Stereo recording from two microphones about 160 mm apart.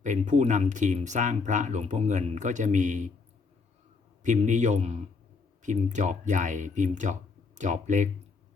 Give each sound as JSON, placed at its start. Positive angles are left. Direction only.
{"t": 0.0, "sound": "speech", "side_deg": -50}
{"t": 4.2, "sound": "speech", "side_deg": -50}